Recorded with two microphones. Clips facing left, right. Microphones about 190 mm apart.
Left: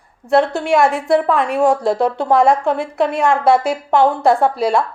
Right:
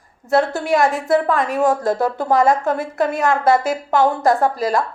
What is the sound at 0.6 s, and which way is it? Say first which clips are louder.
A woman's voice: left 2 dB; centre (ahead or behind).